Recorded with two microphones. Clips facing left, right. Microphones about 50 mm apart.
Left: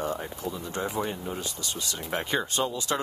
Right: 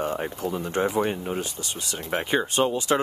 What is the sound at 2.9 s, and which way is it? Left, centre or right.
Speech, right.